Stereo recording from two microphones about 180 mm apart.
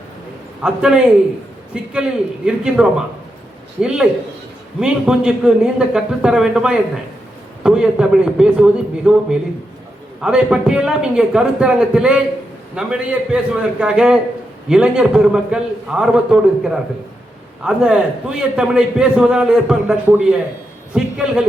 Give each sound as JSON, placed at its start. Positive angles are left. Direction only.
{"t": 0.6, "sound": "a man's voice", "side_deg": -5}